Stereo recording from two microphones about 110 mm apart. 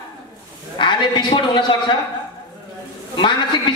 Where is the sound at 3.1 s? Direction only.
45° left (ahead or behind).